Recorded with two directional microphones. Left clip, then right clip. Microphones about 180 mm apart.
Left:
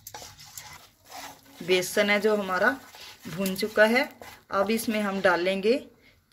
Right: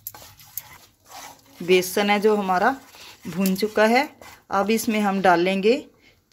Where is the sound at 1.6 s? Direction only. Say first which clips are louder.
Right 4 dB; 50° right (ahead or behind).